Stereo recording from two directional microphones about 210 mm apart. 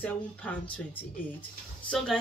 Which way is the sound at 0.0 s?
5° left (ahead or behind).